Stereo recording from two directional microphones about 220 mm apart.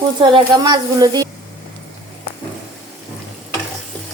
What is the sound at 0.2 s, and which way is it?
Speech, 20° right (ahead or behind).